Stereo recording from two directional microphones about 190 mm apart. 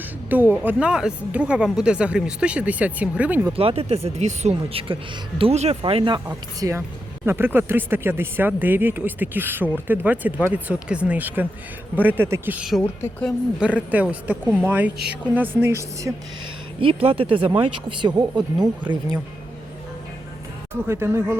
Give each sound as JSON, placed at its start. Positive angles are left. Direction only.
{"t": 0.3, "sound": "speech", "side_deg": -10}
{"t": 3.5, "sound": "speech", "side_deg": -30}
{"t": 6.2, "sound": "speech", "side_deg": -15}
{"t": 12.8, "sound": "a woman's voice", "side_deg": 10}
{"t": 13.6, "sound": "speech", "side_deg": -5}
{"t": 16.8, "sound": "speech", "side_deg": -30}
{"t": 20.8, "sound": "speech", "side_deg": -15}